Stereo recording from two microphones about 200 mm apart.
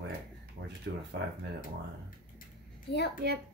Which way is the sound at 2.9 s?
55° left (ahead or behind).